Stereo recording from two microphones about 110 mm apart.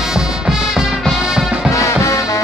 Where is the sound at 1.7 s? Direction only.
30° left (ahead or behind).